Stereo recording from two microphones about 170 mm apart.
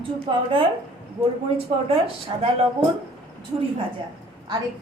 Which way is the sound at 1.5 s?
35° right (ahead or behind).